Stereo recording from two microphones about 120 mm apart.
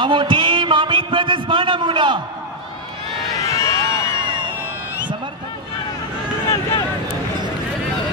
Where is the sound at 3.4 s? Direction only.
25° left (ahead or behind).